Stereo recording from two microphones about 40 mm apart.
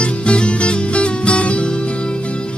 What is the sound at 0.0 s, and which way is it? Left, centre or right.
Music, left.